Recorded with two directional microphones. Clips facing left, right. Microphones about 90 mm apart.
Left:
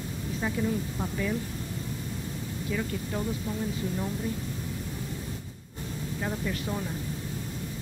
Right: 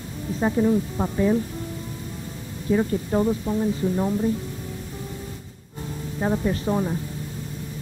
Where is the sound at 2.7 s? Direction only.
35° right (ahead or behind).